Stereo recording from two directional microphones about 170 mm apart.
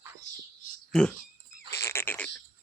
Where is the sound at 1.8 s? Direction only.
15° left (ahead or behind).